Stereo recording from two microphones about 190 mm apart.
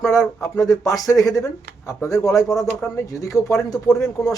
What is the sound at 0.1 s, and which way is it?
A man's voice, 15° left (ahead or behind).